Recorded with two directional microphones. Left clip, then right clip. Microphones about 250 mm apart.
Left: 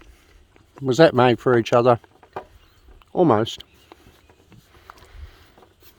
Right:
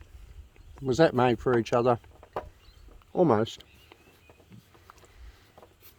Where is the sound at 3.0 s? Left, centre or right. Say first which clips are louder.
Left 6 dB; left.